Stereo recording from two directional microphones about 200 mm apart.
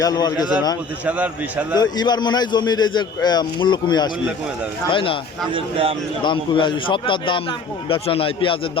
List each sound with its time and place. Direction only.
0.0 s a man's voice: 20° left (ahead or behind)
1.0 s a man's voice: 5° right (ahead or behind)
1.7 s a man's voice: 20° left (ahead or behind)
6.2 s a man's voice: 25° left (ahead or behind)